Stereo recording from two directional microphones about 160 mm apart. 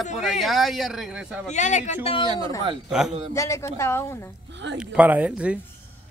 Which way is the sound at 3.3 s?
20° left (ahead or behind).